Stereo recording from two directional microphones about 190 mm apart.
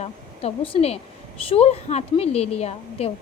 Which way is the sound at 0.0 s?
30° left (ahead or behind).